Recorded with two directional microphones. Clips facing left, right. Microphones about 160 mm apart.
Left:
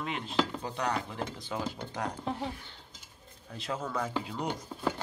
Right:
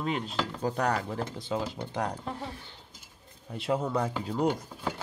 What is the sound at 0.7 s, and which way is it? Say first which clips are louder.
Speech: right 4 dB; 45° right (ahead or behind).